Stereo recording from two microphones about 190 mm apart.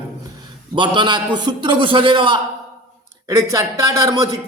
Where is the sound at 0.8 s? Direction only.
25° right (ahead or behind).